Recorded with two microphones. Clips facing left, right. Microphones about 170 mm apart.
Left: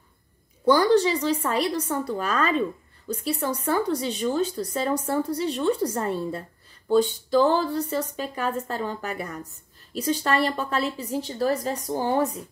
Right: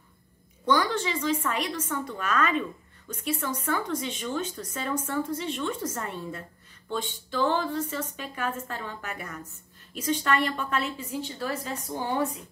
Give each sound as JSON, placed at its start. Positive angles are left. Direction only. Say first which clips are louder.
{"t": 0.7, "sound": "speech", "louder": "left 7 dB", "side_deg": 35}